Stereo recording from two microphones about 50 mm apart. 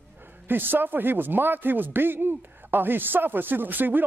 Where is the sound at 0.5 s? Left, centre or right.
Right.